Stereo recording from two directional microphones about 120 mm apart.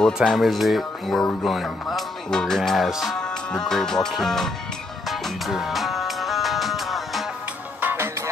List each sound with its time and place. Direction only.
0.0 s speech: 5° left (ahead or behind)
5.0 s music: centre (ahead or behind)
7.8 s music: 15° right (ahead or behind)